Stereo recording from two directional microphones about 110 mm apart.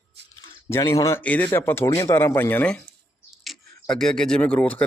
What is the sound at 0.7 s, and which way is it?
Speech, 25° left (ahead or behind).